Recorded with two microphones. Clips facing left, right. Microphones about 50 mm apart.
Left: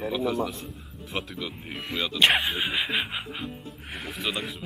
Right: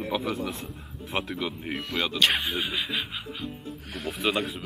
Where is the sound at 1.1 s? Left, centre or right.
Centre.